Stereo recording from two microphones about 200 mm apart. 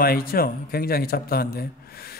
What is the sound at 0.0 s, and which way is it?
A man's voice, 50° left (ahead or behind).